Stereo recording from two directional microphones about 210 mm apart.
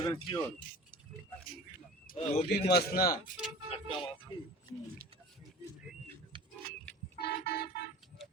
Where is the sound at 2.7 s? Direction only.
45° left (ahead or behind).